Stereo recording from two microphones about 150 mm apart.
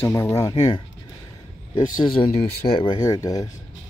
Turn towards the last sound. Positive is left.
turn(degrees=25)  # may be behind; listen again after turning